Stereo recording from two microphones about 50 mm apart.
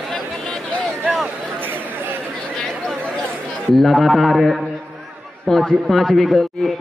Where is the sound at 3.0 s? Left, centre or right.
Left.